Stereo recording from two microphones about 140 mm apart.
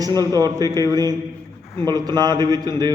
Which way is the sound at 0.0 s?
25° right (ahead or behind).